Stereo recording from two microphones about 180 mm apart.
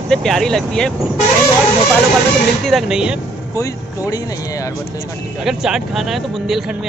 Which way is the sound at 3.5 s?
20° left (ahead or behind).